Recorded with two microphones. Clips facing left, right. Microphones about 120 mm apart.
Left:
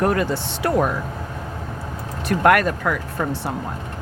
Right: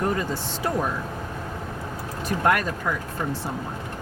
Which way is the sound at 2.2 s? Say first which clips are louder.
Left 6 dB; 70° left (ahead or behind).